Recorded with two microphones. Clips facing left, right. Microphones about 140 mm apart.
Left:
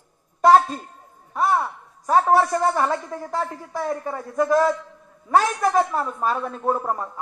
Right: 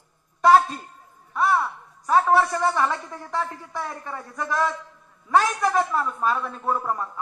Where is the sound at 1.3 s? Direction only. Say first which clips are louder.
Left 1 dB; 40° left (ahead or behind).